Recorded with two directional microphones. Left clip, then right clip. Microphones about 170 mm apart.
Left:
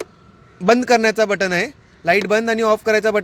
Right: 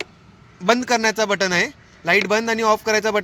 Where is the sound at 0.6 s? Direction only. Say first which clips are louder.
Left 4 dB; 60° left (ahead or behind).